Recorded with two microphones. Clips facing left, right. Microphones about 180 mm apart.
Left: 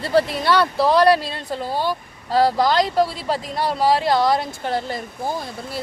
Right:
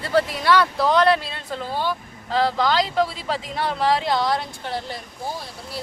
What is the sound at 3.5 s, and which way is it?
Speech, 35° left (ahead or behind).